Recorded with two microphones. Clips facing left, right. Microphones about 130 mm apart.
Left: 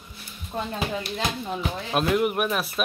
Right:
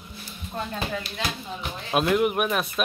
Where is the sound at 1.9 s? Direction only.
Centre (ahead or behind).